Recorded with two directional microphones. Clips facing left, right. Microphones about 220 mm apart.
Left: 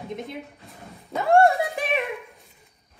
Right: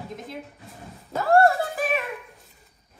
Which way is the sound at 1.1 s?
Centre (ahead or behind).